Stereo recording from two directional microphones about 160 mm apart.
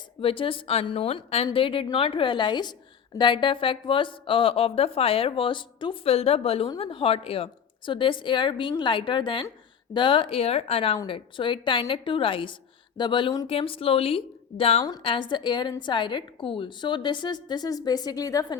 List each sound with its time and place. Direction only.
0.2 s a woman's voice: 35° left (ahead or behind)